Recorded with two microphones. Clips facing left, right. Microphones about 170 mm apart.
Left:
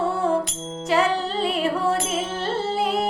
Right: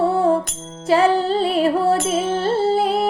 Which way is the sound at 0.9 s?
30° right (ahead or behind).